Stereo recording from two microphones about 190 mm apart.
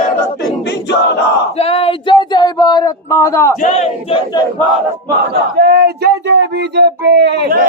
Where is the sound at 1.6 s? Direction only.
30° left (ahead or behind); by 3.5 s 15° left (ahead or behind).